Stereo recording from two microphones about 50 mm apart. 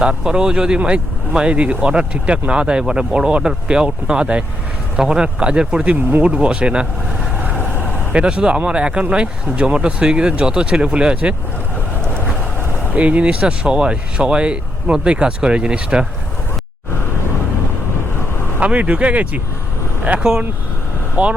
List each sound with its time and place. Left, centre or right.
0.0 s speech: centre
8.1 s speech: right
12.9 s speech: right
18.6 s speech: right
21.2 s speech: centre